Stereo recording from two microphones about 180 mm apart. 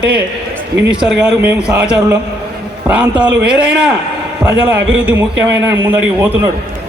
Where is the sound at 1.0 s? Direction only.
5° right (ahead or behind).